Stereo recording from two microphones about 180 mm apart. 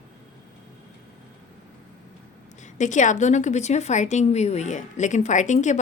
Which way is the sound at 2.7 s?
45° left (ahead or behind).